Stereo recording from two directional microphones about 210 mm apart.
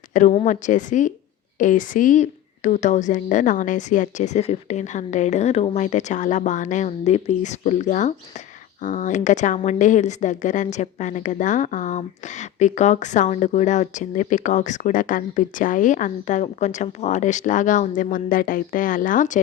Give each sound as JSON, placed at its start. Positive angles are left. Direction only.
{"t": 0.1, "sound": "a woman's voice", "side_deg": 35}